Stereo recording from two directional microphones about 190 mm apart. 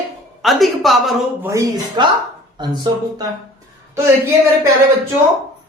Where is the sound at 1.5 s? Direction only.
20° right (ahead or behind).